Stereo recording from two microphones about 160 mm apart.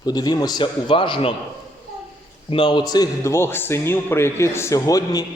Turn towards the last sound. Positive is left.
turn(degrees=25)  # may be behind; listen again after turning